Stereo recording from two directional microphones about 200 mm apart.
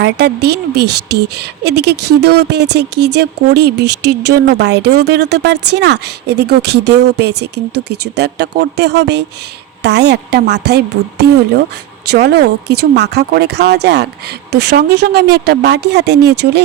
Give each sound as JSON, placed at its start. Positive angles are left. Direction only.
{"t": 0.0, "sound": "a woman's voice", "side_deg": -55}